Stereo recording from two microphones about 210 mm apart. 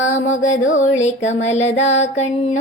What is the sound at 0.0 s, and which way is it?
Music, 65° left (ahead or behind).